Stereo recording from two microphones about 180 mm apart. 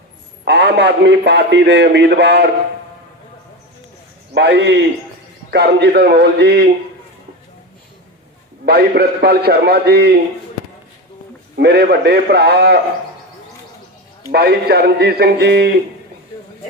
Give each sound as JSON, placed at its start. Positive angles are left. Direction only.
{"t": 0.4, "sound": "a man's voice", "side_deg": -70}
{"t": 4.4, "sound": "a man's voice", "side_deg": -75}
{"t": 8.6, "sound": "a man's voice", "side_deg": -65}
{"t": 11.5, "sound": "a man's voice", "side_deg": -65}
{"t": 14.3, "sound": "a man's voice", "side_deg": -60}